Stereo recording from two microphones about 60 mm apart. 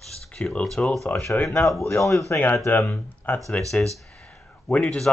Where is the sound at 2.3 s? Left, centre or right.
Left.